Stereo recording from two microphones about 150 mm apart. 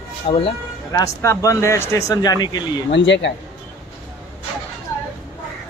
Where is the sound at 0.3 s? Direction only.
35° left (ahead or behind).